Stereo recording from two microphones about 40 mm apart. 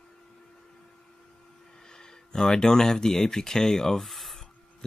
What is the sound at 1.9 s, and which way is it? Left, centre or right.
Speech, centre.